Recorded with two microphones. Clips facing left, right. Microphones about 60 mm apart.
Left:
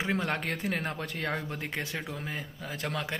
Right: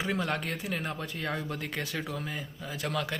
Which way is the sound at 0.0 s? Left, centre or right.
Left.